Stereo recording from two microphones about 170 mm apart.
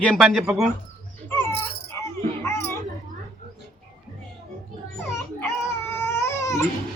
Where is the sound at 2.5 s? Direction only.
15° left (ahead or behind).